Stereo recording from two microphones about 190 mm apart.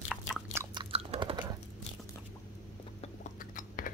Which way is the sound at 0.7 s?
30° right (ahead or behind).